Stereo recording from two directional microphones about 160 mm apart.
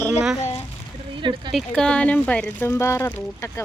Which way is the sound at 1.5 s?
5° left (ahead or behind).